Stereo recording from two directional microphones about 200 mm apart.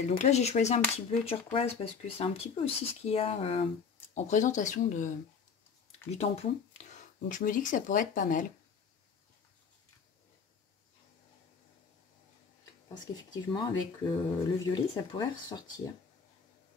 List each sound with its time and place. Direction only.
0.1 s speech: 35° left (ahead or behind)
13.0 s speech: 20° left (ahead or behind)